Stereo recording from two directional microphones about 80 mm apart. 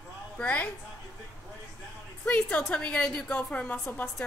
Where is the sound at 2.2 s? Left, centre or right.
Centre.